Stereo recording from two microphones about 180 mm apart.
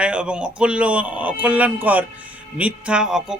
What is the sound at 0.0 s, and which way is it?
Speech, 5° right (ahead or behind).